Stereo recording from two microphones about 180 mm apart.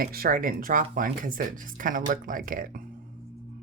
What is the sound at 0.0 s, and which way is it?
Speech, 55° right (ahead or behind).